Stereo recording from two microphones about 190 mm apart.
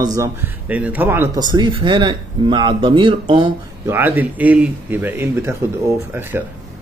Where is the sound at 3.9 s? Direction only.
10° right (ahead or behind).